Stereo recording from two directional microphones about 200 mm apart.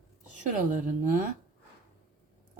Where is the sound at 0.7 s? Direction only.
40° right (ahead or behind).